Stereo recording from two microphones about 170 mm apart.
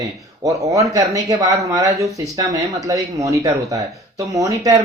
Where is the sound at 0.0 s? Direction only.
20° right (ahead or behind).